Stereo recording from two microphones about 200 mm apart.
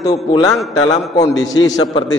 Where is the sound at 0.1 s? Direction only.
20° left (ahead or behind).